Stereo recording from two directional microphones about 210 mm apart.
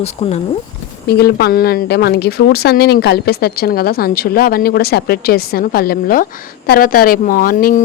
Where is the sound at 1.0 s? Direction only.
50° left (ahead or behind).